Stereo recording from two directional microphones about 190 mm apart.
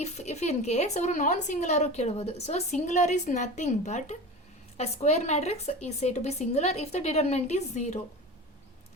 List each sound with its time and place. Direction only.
0.0 s speech: 35° left (ahead or behind)